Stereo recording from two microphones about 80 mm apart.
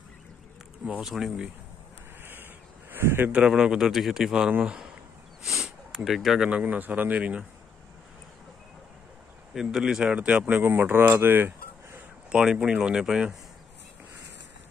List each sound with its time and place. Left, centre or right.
0.8 s a man's voice: centre
2.9 s a sound: right
3.3 s a man's voice: centre
5.4 s sniff: centre
6.5 s speech: right
9.5 s speech: centre; by 12.0 s right
12.3 s a man's voice: centre